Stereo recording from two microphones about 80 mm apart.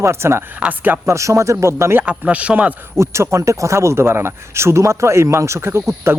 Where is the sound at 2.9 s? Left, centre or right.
Right.